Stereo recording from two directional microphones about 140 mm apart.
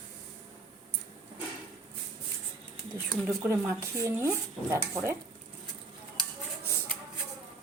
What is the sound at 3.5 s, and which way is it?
Speech, 20° right (ahead or behind).